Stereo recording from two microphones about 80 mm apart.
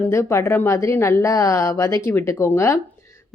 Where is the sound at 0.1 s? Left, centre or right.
Left.